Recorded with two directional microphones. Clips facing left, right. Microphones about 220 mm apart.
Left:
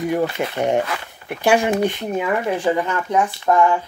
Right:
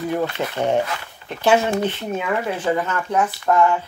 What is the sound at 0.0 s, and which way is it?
Speech, 15° left (ahead or behind).